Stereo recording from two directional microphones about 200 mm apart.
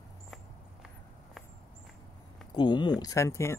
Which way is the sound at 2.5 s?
20° left (ahead or behind).